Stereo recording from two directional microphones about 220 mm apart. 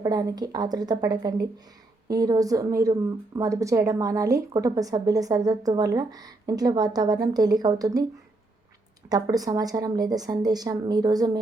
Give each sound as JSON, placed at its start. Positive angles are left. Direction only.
{"t": 0.0, "sound": "a woman's voice", "side_deg": -15}
{"t": 9.0, "sound": "a woman's voice", "side_deg": -15}